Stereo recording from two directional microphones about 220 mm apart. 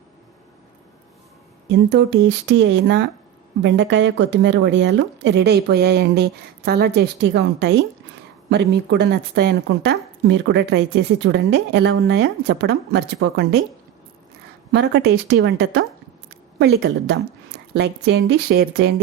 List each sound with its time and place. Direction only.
1.7 s speech: 50° right (ahead or behind)
14.7 s speech: 50° right (ahead or behind)